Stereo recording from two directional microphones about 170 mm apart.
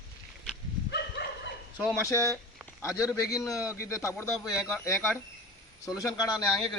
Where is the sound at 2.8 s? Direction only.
20° left (ahead or behind).